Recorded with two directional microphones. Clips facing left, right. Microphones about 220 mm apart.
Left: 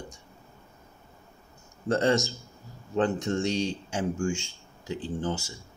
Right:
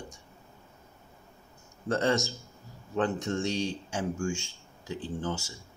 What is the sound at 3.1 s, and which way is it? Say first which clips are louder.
Speech: left 3 dB; 20° left (ahead or behind).